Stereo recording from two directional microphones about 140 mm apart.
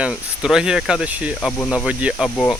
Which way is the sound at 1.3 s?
10° left (ahead or behind).